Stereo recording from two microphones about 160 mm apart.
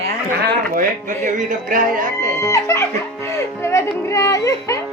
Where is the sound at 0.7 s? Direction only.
55° right (ahead or behind).